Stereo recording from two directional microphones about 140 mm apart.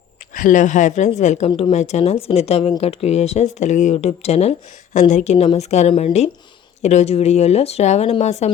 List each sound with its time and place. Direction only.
0.3 s a woman's voice: 65° left (ahead or behind)
1.5 s speech: 35° left (ahead or behind)
1.7 s speech: 50° left (ahead or behind)